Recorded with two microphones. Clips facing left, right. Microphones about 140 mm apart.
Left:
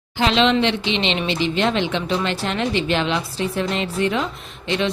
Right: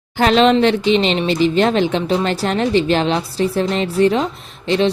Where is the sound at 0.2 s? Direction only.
45° right (ahead or behind).